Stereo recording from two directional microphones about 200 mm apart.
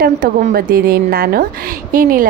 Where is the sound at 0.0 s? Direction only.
45° right (ahead or behind).